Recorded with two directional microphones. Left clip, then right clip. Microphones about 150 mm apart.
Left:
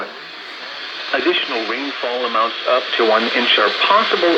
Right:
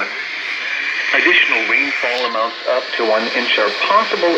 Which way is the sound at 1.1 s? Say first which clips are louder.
Right 5 dB; 50° left (ahead or behind).